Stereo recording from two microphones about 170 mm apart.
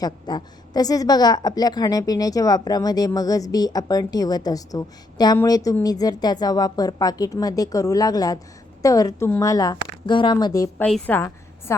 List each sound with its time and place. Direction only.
0.0 s a woman's voice: 25° left (ahead or behind)
10.8 s a woman's voice: 5° left (ahead or behind)